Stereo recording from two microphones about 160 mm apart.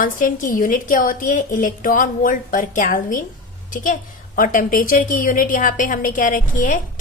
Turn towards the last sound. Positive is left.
turn(degrees=55)  # may be behind; listen again after turning